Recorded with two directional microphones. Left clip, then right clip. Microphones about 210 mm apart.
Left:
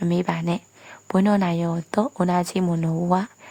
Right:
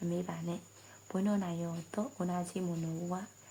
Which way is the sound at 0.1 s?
50° left (ahead or behind).